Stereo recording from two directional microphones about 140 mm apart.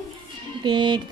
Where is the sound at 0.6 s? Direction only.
35° right (ahead or behind).